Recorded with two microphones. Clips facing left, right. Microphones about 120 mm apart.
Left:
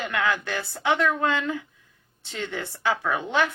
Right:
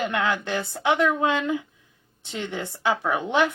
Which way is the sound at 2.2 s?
15° right (ahead or behind).